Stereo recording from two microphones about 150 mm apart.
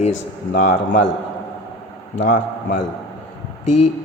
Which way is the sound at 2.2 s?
60° left (ahead or behind).